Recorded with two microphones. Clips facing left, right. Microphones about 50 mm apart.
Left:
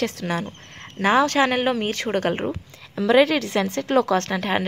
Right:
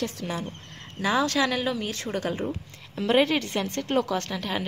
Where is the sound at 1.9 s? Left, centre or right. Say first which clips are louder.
Left 6 dB; left.